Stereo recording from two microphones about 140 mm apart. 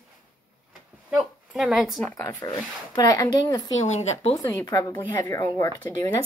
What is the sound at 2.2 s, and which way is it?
Speech, 30° left (ahead or behind).